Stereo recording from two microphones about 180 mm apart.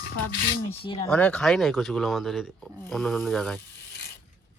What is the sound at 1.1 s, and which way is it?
Speech, 5° left (ahead or behind).